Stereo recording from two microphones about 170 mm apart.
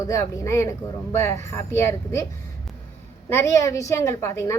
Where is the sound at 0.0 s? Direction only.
20° left (ahead or behind).